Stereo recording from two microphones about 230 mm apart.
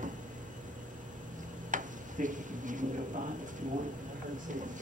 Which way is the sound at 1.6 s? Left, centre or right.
Right.